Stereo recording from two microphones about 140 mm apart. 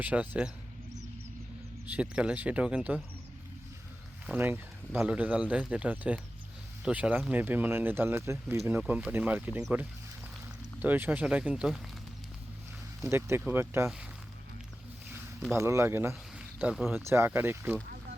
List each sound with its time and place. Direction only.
0.0 s speech: 10° right (ahead or behind)
1.9 s speech: 10° right (ahead or behind)
4.3 s speech: 15° right (ahead or behind)
10.8 s speech: 10° right (ahead or behind)
13.1 s speech: 15° right (ahead or behind)
15.5 s speech: 20° right (ahead or behind)